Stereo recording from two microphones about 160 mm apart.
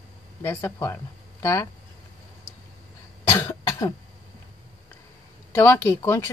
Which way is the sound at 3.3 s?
15° left (ahead or behind).